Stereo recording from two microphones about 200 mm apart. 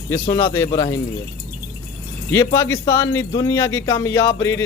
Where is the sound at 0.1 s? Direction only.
10° left (ahead or behind).